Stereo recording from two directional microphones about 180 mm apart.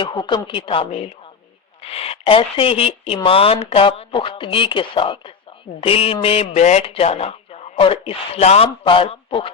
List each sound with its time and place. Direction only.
0.0 s speech: 25° left (ahead or behind)